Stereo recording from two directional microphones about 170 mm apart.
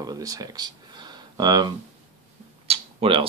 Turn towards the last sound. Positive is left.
turn(degrees=-35)  # may be behind; listen again after turning